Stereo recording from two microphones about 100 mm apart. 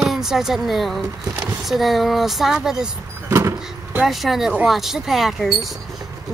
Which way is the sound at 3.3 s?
25° right (ahead or behind).